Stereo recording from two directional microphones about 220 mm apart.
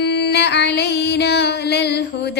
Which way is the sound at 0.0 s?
50° left (ahead or behind).